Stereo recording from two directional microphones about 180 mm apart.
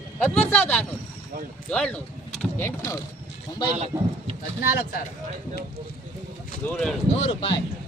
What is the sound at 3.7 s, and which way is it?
Speech, 35° right (ahead or behind).